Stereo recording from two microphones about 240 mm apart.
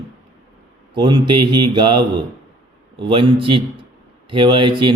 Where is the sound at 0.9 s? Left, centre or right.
Centre.